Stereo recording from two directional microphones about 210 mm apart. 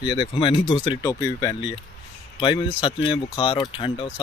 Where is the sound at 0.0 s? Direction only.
20° left (ahead or behind).